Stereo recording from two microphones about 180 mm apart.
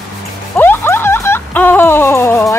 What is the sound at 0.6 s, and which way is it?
Speech, 15° left (ahead or behind).